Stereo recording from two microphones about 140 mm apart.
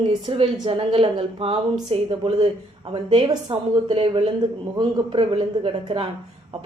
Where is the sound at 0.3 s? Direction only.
45° right (ahead or behind).